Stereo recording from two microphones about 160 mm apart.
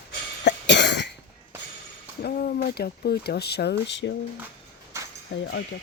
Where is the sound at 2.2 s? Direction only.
80° left.